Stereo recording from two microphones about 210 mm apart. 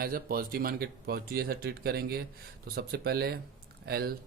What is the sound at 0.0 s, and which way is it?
Speech, 45° right (ahead or behind).